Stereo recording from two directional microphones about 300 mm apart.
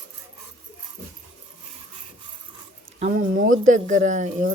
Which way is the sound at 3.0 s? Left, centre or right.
Right.